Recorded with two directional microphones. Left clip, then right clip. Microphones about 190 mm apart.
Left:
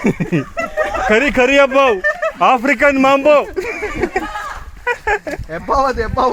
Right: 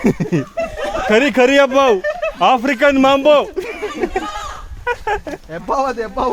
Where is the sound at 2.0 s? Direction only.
5° left (ahead or behind).